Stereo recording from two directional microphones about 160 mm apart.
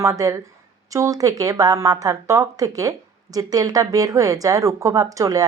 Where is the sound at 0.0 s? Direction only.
20° right (ahead or behind).